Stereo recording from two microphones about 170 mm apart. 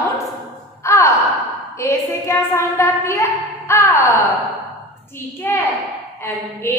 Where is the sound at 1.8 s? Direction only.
15° left (ahead or behind).